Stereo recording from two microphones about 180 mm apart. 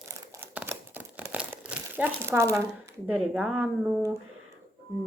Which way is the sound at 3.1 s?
5° right (ahead or behind).